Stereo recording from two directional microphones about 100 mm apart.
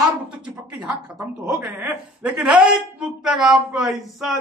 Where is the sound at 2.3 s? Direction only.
10° right (ahead or behind).